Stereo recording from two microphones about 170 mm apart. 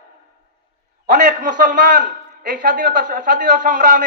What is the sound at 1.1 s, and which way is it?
A man's voice, 50° right (ahead or behind).